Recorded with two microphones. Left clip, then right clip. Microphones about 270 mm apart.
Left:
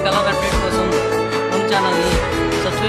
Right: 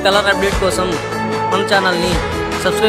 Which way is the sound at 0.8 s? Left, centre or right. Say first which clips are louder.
Left 2 dB; centre.